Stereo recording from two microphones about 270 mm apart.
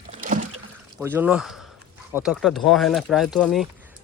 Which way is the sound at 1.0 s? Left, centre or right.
Centre.